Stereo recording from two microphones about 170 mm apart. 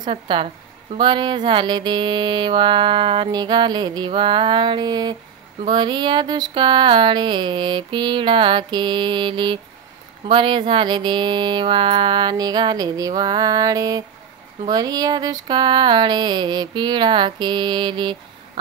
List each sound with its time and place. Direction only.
0.0 s speech: 30° right (ahead or behind)
0.9 s mantra: 25° right (ahead or behind)